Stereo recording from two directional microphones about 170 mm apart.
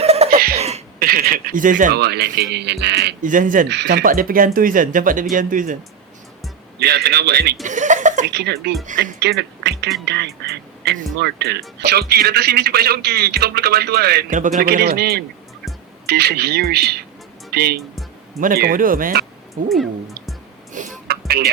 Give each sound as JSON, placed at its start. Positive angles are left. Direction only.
{"t": 0.0, "sound": "sneeze", "side_deg": -35}
{"t": 0.3, "sound": "sneeze", "side_deg": -60}
{"t": 0.9, "sound": "speech", "side_deg": -60}
{"t": 1.9, "sound": "speech", "side_deg": -75}
{"t": 3.2, "sound": "speech", "side_deg": -50}
{"t": 3.7, "sound": "speech", "side_deg": -85}
{"t": 6.7, "sound": "speech", "side_deg": -75}
{"t": 7.6, "sound": "speech", "side_deg": -45}
{"t": 8.3, "sound": "speech", "side_deg": -80}
{"t": 14.3, "sound": "a man's voice", "side_deg": -50}
{"t": 18.3, "sound": "a man's voice", "side_deg": -60}
{"t": 19.6, "sound": "speech", "side_deg": 0}
{"t": 20.8, "sound": "speech", "side_deg": -50}
{"t": 21.1, "sound": "music", "side_deg": -65}